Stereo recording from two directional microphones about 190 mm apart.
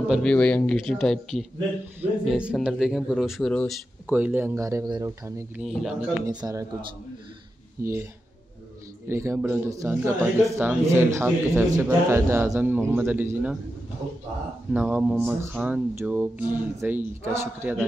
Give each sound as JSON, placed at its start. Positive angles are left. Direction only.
{"t": 0.1, "sound": "speech", "side_deg": 5}
{"t": 4.1, "sound": "speech", "side_deg": -10}
{"t": 5.6, "sound": "speech", "side_deg": 0}
{"t": 6.2, "sound": "speech", "side_deg": -15}
{"t": 7.8, "sound": "speech", "side_deg": -15}
{"t": 9.1, "sound": "speech", "side_deg": -15}
{"t": 14.7, "sound": "speech", "side_deg": -10}